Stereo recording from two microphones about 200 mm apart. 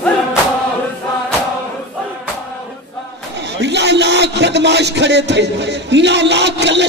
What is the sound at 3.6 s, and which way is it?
Music, 60° right (ahead or behind).